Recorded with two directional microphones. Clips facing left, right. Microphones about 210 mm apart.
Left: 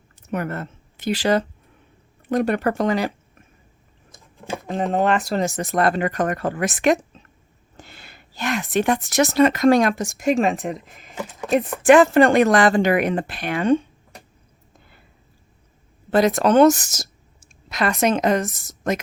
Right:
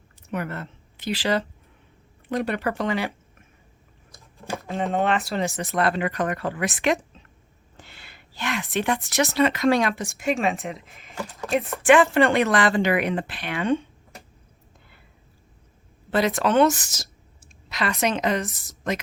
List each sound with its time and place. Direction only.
0.2 s a woman's voice: 45° left (ahead or behind)
4.4 s a sound: 15° left (ahead or behind)
4.7 s speech: 35° left (ahead or behind)
16.0 s speech: 45° left (ahead or behind)